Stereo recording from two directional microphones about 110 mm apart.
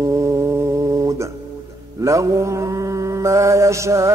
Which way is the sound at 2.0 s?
30° right (ahead or behind).